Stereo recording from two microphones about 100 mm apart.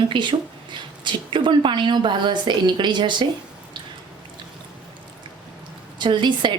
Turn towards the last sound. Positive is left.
turn(degrees=-50)  # may be behind; listen again after turning